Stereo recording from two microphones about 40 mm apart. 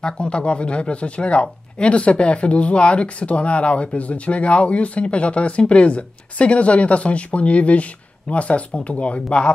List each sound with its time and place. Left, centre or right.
0.0 s speech: left